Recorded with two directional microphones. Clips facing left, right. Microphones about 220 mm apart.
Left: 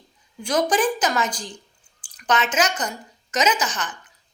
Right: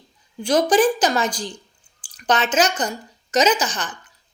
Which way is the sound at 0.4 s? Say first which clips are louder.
Right 4 dB; 30° right (ahead or behind).